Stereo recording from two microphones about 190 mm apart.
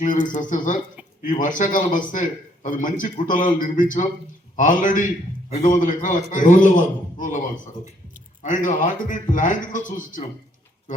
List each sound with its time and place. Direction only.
0.0 s a man's voice: 40° left (ahead or behind)